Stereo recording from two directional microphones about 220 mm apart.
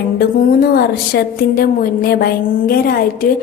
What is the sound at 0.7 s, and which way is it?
A woman's voice, 45° left (ahead or behind).